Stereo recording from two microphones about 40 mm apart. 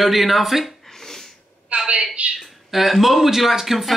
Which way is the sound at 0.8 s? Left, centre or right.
Centre.